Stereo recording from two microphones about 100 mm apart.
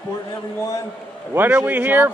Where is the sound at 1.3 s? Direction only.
20° right (ahead or behind).